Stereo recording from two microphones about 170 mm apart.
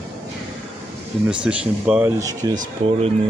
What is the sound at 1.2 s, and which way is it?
Speech, 5° right (ahead or behind).